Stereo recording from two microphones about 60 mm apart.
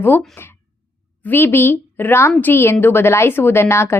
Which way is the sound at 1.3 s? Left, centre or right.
Left.